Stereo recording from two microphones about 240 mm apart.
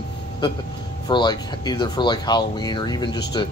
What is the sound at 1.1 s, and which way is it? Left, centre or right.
Speech, centre.